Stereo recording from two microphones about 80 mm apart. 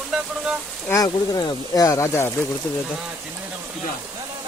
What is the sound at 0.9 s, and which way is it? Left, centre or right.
Speech, left.